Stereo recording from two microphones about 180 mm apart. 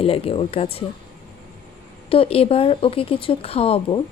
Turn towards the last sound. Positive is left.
turn(degrees=30)  # may be behind; listen again after turning